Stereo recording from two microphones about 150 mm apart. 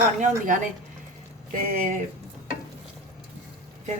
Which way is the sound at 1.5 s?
65° right (ahead or behind).